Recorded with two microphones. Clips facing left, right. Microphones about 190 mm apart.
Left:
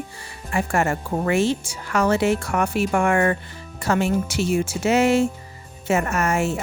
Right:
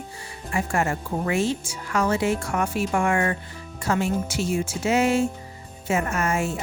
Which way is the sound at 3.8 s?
70° left (ahead or behind).